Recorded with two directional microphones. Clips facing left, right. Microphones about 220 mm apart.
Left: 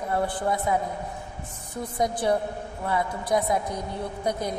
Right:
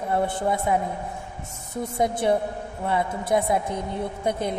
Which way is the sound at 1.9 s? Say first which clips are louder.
Right 2 dB; 25° right (ahead or behind).